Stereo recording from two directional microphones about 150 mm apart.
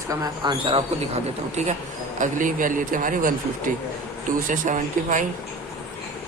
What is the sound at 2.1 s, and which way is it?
A man's voice, 60° right (ahead or behind).